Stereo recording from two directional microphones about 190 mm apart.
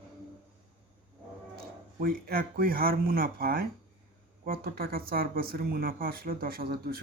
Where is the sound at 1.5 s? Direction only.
50° right (ahead or behind).